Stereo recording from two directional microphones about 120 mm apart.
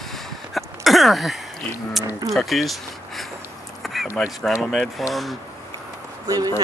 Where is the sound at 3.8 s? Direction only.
Centre (ahead or behind).